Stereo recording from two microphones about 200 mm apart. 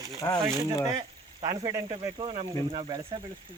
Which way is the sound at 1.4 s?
20° right (ahead or behind).